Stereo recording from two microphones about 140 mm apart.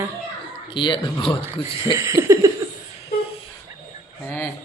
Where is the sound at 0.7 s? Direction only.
35° left (ahead or behind).